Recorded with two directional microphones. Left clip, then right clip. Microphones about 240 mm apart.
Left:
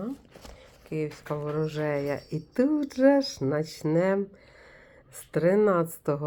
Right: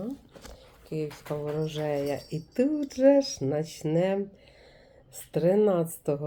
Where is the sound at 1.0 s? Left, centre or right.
Centre.